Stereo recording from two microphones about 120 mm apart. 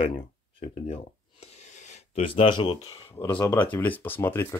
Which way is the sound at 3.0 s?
20° left (ahead or behind).